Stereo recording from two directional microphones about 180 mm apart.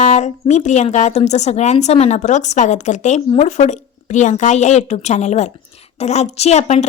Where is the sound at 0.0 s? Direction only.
40° left (ahead or behind).